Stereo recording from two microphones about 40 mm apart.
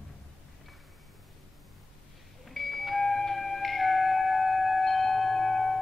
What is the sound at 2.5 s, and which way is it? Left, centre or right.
Music, centre.